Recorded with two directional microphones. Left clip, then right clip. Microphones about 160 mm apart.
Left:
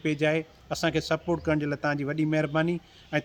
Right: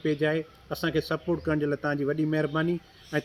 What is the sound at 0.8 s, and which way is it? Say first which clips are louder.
A man's voice: left 1 dB; 25° left (ahead or behind).